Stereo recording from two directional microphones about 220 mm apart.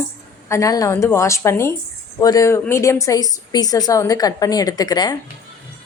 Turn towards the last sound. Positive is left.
turn(degrees=15)  # may be behind; listen again after turning